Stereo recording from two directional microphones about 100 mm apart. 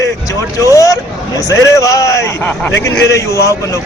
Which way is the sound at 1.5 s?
35° left (ahead or behind).